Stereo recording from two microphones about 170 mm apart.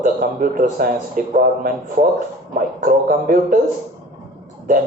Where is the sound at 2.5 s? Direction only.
55° right (ahead or behind).